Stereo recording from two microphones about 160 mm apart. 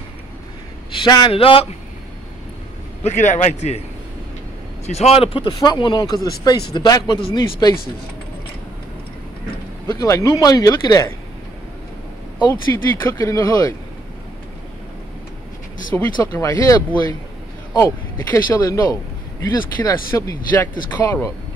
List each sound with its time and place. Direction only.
0.9 s speech: 30° left (ahead or behind)
3.0 s a man's voice: 50° left (ahead or behind)
4.8 s speech: 40° left (ahead or behind)
9.8 s speech: 20° left (ahead or behind)
12.7 s speech: 20° left (ahead or behind)
15.9 s speech: 15° left (ahead or behind)